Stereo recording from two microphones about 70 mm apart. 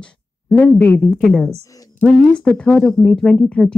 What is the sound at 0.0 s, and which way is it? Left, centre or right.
Speech, centre.